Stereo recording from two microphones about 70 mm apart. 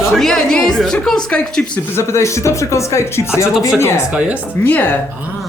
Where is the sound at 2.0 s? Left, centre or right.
Left.